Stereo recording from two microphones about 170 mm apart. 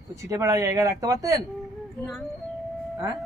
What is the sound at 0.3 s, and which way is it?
A man's voice, 20° right (ahead or behind).